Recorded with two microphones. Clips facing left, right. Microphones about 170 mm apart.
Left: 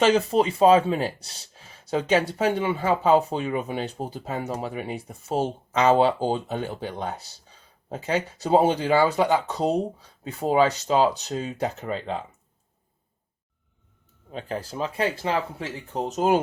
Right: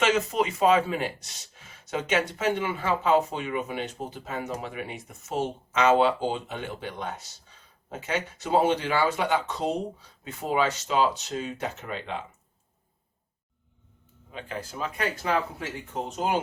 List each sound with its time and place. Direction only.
0.0 s speech: 35° left (ahead or behind)
14.3 s speech: 35° left (ahead or behind)
16.0 s speech: 40° left (ahead or behind)